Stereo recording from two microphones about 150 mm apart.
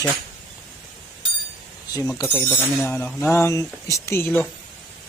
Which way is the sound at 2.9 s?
15° left (ahead or behind).